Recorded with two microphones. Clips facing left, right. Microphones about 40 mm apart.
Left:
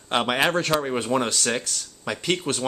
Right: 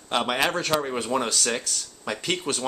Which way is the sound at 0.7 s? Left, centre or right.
Centre.